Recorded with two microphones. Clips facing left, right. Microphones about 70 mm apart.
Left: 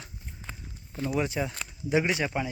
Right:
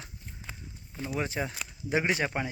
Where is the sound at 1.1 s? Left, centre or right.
Right.